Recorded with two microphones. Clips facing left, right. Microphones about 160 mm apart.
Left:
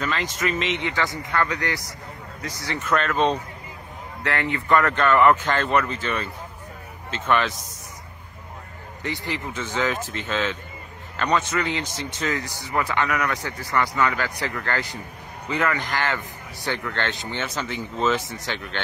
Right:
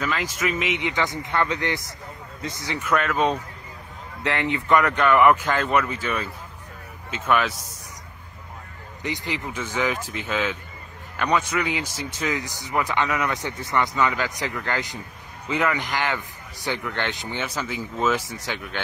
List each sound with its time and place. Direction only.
0.0 s speech: 5° right (ahead or behind)
4.2 s speech: 20° right (ahead or behind)
9.0 s speech: 15° right (ahead or behind)